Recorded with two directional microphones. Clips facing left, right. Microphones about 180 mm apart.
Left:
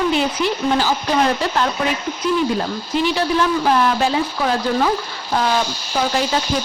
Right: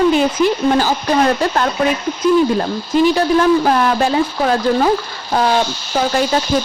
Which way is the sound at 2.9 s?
45° right (ahead or behind).